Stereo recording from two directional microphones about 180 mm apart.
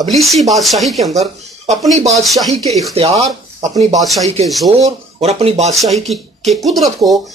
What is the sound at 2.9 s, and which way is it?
Speech, 35° right (ahead or behind).